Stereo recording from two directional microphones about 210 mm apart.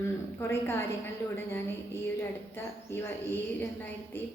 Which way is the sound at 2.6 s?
10° left (ahead or behind).